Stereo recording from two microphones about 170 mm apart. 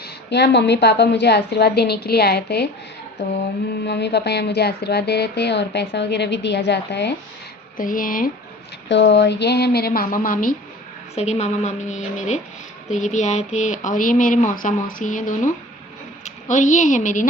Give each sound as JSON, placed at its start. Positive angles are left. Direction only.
{"t": 0.0, "sound": "a woman's voice", "side_deg": 75}
{"t": 3.8, "sound": "speech", "side_deg": 85}
{"t": 7.8, "sound": "speech", "side_deg": 55}
{"t": 8.9, "sound": "a woman's voice", "side_deg": 90}
{"t": 11.1, "sound": "a woman's voice", "side_deg": 40}